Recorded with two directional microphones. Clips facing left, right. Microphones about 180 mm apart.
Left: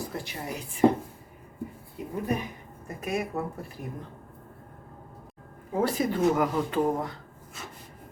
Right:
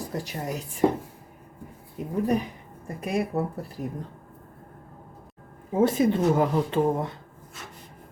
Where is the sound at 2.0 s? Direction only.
45° right (ahead or behind).